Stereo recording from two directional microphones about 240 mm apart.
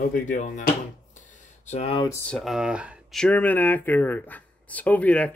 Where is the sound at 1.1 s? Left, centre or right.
Left.